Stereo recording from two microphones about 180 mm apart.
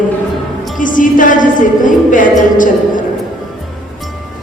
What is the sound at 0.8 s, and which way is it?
A woman's voice, 45° left (ahead or behind).